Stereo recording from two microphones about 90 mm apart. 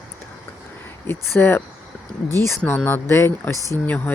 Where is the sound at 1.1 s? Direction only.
25° left (ahead or behind).